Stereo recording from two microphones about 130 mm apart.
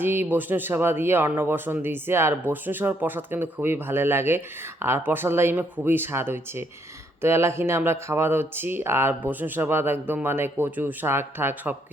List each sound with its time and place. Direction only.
0.0 s speech: 15° right (ahead or behind)